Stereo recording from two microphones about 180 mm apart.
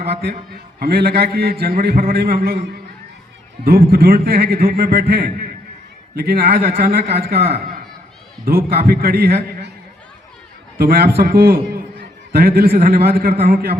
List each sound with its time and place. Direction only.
0.0 s a man's voice: 60° right (ahead or behind)
10.8 s a man's voice: 60° right (ahead or behind)